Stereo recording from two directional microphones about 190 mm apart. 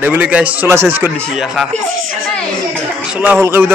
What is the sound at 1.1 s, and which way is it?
Speech, centre (ahead or behind).